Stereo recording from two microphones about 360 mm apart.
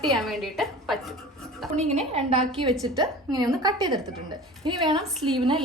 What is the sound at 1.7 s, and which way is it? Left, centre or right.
A woman's voice, centre.